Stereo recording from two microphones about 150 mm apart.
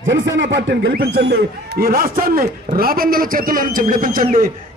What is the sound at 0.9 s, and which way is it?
A man's voice, 90° right.